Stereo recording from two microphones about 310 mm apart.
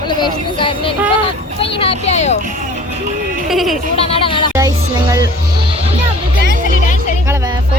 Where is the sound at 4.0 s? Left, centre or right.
Centre.